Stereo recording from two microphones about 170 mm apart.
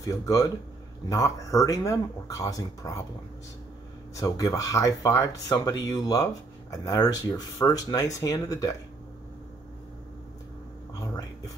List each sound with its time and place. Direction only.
0.0 s speech: 20° left (ahead or behind)
4.1 s speech: 20° left (ahead or behind)